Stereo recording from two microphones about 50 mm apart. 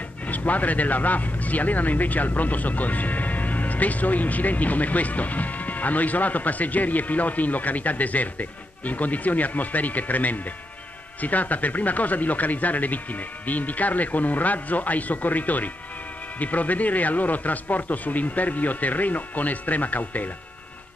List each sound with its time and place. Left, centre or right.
0.3 s speech: left